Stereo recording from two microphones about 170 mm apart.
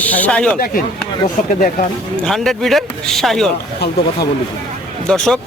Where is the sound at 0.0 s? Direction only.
10° left (ahead or behind).